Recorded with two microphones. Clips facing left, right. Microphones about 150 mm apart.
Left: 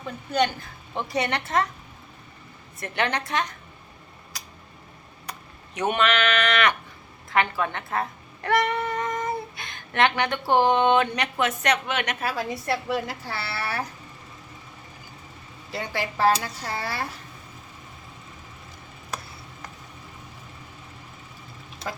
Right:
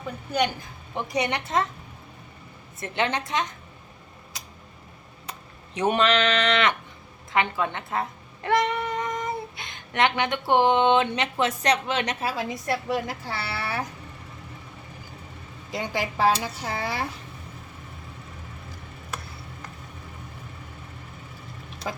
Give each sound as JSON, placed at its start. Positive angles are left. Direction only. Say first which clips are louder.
{"t": 0.3, "sound": "a woman's voice", "louder": "left 2 dB", "side_deg": -10}
{"t": 2.8, "sound": "a woman's voice", "louder": "even", "side_deg": -20}
{"t": 4.3, "sound": "tick", "louder": "even", "side_deg": -25}
{"t": 5.2, "sound": "a woman's voice", "louder": "left 1 dB", "side_deg": -30}
{"t": 15.7, "sound": "a woman's voice", "louder": "right 1 dB", "side_deg": -15}